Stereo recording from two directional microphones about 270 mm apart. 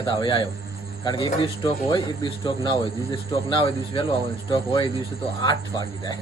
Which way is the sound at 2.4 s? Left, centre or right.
Centre.